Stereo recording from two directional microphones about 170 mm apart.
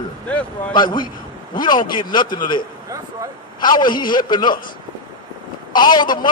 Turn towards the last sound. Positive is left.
turn(degrees=25)  # may be behind; listen again after turning